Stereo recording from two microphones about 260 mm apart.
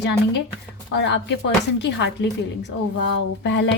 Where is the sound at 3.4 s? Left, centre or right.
Left.